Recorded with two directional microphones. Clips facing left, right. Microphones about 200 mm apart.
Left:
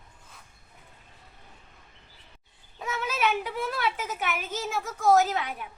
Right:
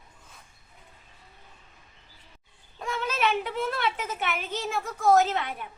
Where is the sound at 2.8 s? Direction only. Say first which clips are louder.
Right 1 dB; 5° left (ahead or behind).